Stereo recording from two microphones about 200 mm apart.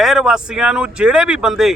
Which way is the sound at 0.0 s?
Centre (ahead or behind).